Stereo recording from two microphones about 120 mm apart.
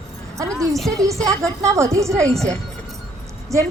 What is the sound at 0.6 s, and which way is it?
Speech, centre (ahead or behind).